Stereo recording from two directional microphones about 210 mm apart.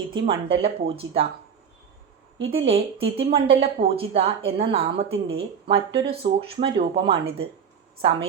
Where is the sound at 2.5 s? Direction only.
25° right (ahead or behind).